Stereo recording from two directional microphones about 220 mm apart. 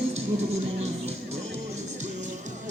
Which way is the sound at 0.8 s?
30° right (ahead or behind).